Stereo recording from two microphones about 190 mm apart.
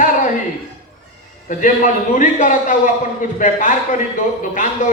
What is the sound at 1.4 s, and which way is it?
A man's voice, 40° left (ahead or behind).